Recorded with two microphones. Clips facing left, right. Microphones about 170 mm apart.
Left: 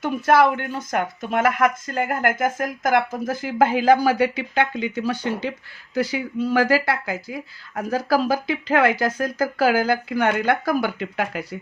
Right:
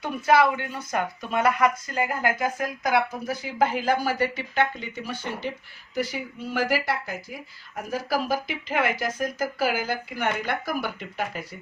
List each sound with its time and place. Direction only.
0.7 s speech: 90° left
5.9 s speech: 80° left